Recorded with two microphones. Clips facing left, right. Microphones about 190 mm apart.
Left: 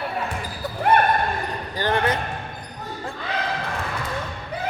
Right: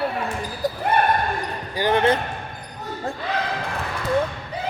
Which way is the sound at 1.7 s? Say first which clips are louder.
Right 3 dB; 15° right (ahead or behind).